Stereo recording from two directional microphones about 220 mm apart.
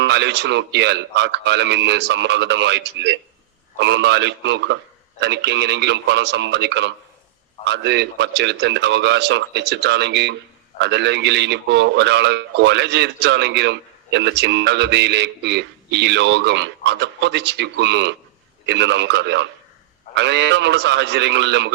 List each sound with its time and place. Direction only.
0.0 s a man's voice: 50° right (ahead or behind)